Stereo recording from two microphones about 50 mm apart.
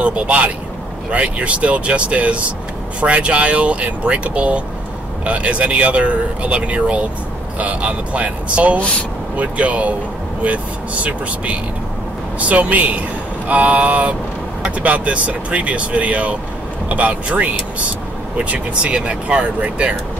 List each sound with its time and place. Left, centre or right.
0.0 s speech: right